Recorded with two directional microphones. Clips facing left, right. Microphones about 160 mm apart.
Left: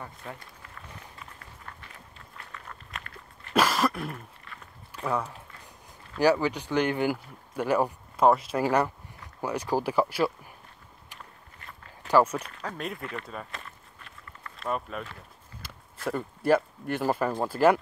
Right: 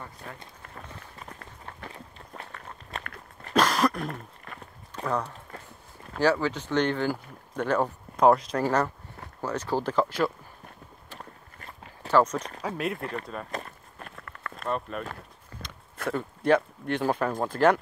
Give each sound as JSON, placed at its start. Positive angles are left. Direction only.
{"t": 1.2, "sound": "run", "side_deg": -45}
{"t": 2.3, "sound": "walk", "side_deg": -35}
{"t": 3.5, "sound": "a sound", "side_deg": 5}
{"t": 4.0, "sound": "a sound", "side_deg": -40}
{"t": 5.0, "sound": "speech", "side_deg": 5}
{"t": 12.1, "sound": "speech", "side_deg": 10}
{"t": 12.4, "sound": "speech", "side_deg": -35}
{"t": 12.6, "sound": "speech", "side_deg": -5}
{"t": 13.5, "sound": "a sound", "side_deg": -45}
{"t": 14.7, "sound": "speech", "side_deg": 0}
{"t": 15.5, "sound": "a sound", "side_deg": -50}
{"t": 16.1, "sound": "speech", "side_deg": 5}